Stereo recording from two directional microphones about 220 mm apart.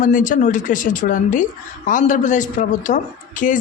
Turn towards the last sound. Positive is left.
turn(degrees=35)  # may be behind; listen again after turning